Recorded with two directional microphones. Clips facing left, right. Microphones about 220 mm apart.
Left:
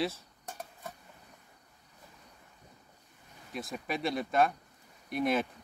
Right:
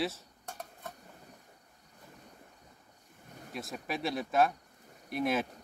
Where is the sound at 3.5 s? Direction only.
Centre (ahead or behind).